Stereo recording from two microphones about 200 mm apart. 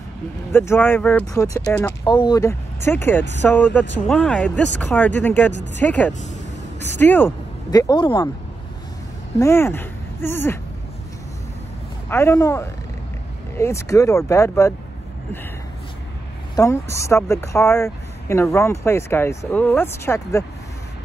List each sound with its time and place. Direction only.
0.5 s speech: 10° left (ahead or behind)
9.4 s speech: 10° left (ahead or behind)
12.1 s speech: 10° left (ahead or behind)
16.5 s speech: 15° left (ahead or behind)